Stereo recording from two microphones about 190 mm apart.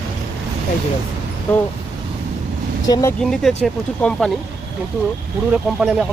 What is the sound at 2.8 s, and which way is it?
Speech, 20° left (ahead or behind).